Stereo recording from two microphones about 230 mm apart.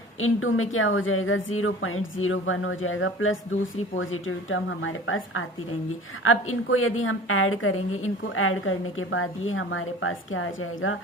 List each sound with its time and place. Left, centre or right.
0.2 s a woman's voice: left